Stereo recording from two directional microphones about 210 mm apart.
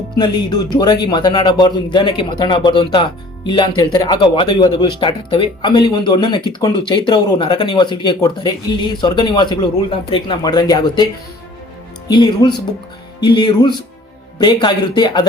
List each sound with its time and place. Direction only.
0.2 s a man's voice: 20° left (ahead or behind)